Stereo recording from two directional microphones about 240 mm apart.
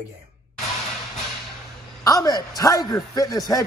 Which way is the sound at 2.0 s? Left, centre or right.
Centre.